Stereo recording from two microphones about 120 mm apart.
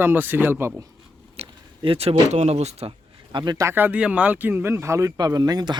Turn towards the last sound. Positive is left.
turn(degrees=-35)  # may be behind; listen again after turning